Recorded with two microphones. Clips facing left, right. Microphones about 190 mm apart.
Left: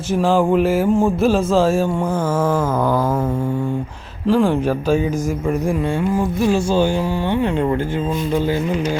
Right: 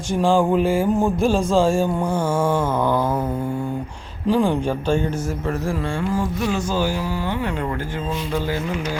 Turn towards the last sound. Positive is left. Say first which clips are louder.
# left 5 dB
turn(degrees=25)  # may be behind; listen again after turning